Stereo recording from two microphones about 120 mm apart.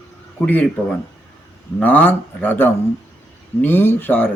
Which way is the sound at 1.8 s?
15° left (ahead or behind).